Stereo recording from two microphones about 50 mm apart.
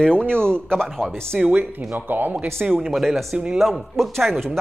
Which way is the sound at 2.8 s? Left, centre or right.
Centre.